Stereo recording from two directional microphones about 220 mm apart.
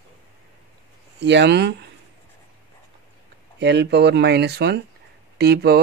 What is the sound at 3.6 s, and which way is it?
Speech, 50° right (ahead or behind).